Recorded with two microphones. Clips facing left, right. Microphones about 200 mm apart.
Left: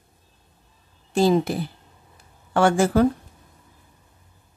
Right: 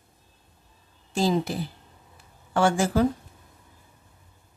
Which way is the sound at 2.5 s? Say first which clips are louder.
Left 4 dB; 60° left (ahead or behind).